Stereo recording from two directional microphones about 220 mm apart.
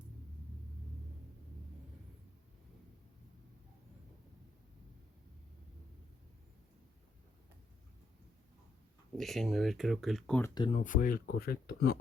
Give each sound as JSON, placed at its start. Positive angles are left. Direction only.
{"t": 9.1, "sound": "speech", "side_deg": 0}
{"t": 10.5, "sound": "speech", "side_deg": 20}
{"t": 10.8, "sound": "speech", "side_deg": 35}